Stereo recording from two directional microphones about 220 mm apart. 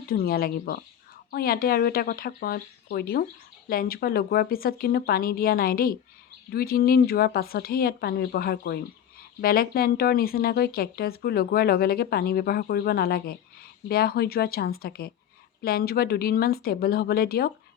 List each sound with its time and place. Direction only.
0.1 s speech: 45° left (ahead or behind)